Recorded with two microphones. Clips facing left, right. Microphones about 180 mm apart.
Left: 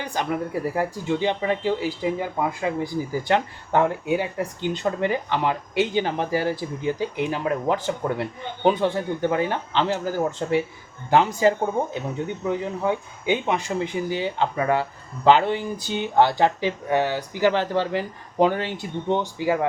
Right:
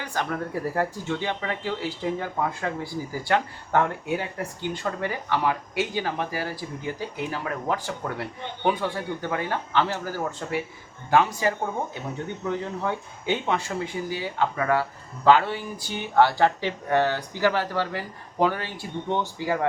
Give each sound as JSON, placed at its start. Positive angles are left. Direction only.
{"t": 0.0, "sound": "speech", "side_deg": 15}